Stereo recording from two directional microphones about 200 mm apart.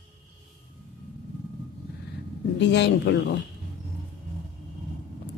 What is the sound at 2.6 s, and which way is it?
Speech, 60° left (ahead or behind).